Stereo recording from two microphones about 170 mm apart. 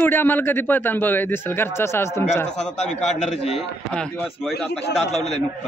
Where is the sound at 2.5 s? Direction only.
40° left (ahead or behind).